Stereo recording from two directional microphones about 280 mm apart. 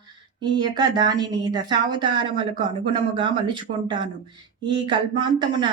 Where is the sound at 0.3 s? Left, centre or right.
Centre.